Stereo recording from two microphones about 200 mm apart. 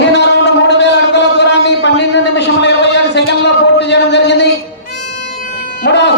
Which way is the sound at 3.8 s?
60° left (ahead or behind).